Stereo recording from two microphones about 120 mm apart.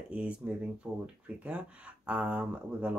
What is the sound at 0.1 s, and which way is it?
Speech, 10° right (ahead or behind).